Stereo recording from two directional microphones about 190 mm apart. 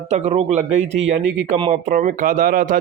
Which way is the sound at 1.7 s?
45° right (ahead or behind).